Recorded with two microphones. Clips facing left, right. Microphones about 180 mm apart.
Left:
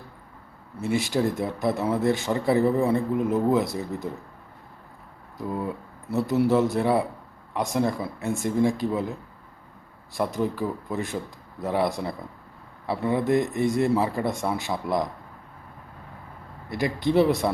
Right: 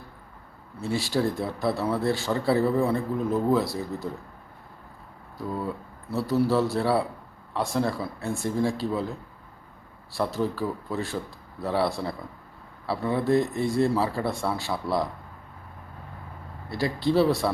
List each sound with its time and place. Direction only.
0.8 s speech: 20° left (ahead or behind)
5.4 s speech: 20° left (ahead or behind)
16.6 s speech: 20° left (ahead or behind)